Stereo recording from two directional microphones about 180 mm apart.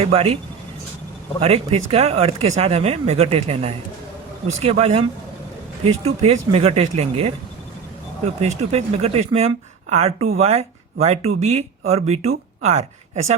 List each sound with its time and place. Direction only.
0.0 s speech: 35° right (ahead or behind)
1.4 s speech: 35° right (ahead or behind)
8.4 s speech: 35° right (ahead or behind)